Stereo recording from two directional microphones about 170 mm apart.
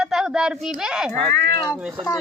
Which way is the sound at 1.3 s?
15° left (ahead or behind).